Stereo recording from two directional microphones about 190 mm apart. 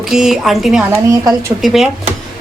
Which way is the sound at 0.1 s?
Centre (ahead or behind).